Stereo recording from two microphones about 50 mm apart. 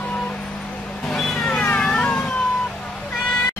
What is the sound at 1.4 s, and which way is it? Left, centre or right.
Cat, centre.